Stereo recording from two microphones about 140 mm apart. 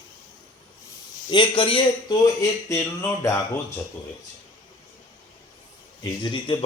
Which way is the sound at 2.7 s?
20° left (ahead or behind).